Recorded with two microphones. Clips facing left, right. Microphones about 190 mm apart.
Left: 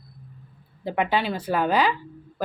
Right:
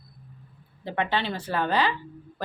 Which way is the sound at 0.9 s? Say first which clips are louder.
Left 3 dB; 10° left (ahead or behind).